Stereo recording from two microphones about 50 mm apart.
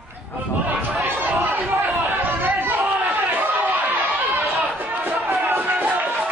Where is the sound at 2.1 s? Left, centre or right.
Right.